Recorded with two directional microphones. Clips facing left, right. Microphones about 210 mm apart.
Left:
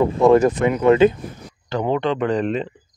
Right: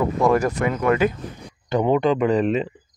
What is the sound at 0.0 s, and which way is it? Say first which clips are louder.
Speech: left 5 dB; 25° left (ahead or behind).